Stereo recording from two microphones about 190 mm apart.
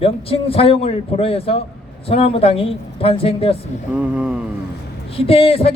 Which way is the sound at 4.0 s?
5° right (ahead or behind).